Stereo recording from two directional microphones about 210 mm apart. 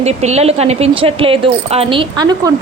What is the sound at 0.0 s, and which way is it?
A woman's voice, 30° right (ahead or behind).